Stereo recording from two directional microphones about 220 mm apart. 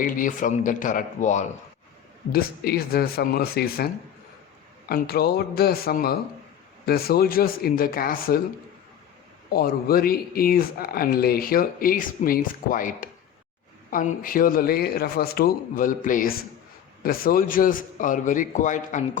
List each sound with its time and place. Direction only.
0.0 s a man's voice: 35° left (ahead or behind)
2.3 s speech: 45° left (ahead or behind)
4.9 s a man's voice: 45° left (ahead or behind)
9.5 s a man's voice: 45° left (ahead or behind)